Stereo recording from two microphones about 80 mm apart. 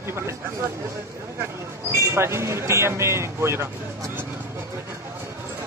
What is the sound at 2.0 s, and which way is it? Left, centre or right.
Speech, right.